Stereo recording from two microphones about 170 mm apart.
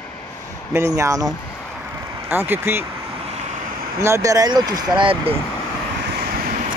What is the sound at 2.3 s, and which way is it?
Speech, 15° right (ahead or behind).